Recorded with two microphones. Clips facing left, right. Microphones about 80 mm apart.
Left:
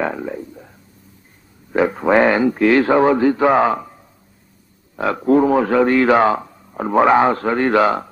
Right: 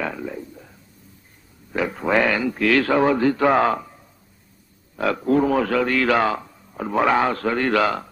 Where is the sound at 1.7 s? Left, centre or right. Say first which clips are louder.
Left 6 dB; left.